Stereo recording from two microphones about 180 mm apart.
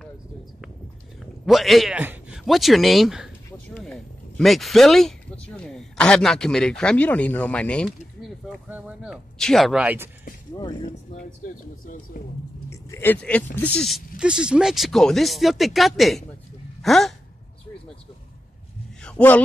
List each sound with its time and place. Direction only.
1.2 s speech: centre (ahead or behind)
10.5 s speech: 25° left (ahead or behind)
11.8 s speech: 50° left (ahead or behind)
12.6 s speech: 15° left (ahead or behind)
19.0 s a man's voice: 5° left (ahead or behind)